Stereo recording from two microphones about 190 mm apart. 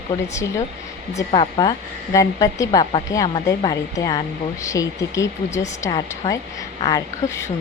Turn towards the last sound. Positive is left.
turn(degrees=15)  # may be behind; listen again after turning